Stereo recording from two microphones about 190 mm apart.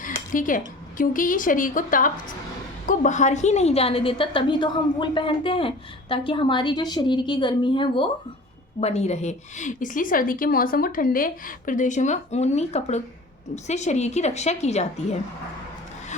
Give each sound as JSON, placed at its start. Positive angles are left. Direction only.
{"t": 0.3, "sound": "a woman's voice", "side_deg": 45}